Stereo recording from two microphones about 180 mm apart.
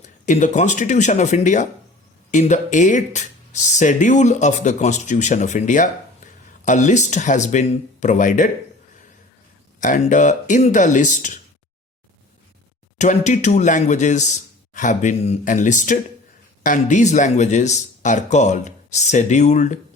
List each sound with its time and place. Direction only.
0.0 s speech: 45° left (ahead or behind)
9.8 s speech: 45° left (ahead or behind)
13.0 s speech: 40° left (ahead or behind)